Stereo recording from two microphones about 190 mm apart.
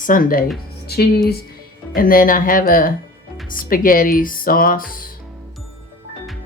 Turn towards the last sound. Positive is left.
turn(degrees=50)  # may be behind; listen again after turning